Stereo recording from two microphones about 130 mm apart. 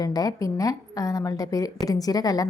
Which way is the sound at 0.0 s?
30° left (ahead or behind).